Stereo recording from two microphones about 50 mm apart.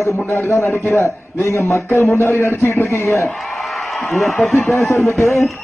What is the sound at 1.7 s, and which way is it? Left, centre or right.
A man's voice, left.